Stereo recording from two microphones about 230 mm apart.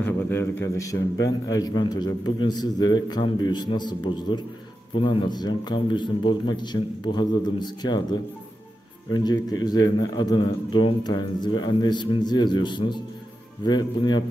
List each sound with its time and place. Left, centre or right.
0.0 s a man's voice: centre